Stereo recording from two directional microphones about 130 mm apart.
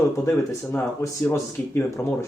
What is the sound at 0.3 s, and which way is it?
Speech, 20° left (ahead or behind).